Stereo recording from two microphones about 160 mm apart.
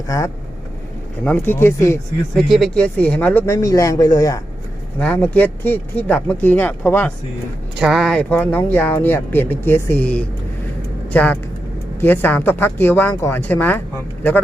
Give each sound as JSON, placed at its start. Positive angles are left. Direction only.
{"t": 0.1, "sound": "speech", "side_deg": 20}
{"t": 2.3, "sound": "speech", "side_deg": 0}
{"t": 4.9, "sound": "speech", "side_deg": 10}
{"t": 7.8, "sound": "speech", "side_deg": 0}